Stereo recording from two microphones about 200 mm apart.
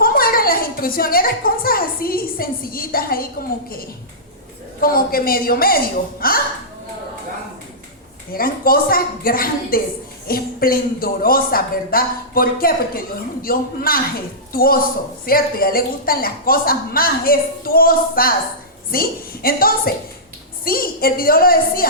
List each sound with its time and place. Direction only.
0.0 s a woman's voice: 45° left (ahead or behind)
4.8 s a man's voice: 45° left (ahead or behind)
8.3 s a man's voice: 45° left (ahead or behind)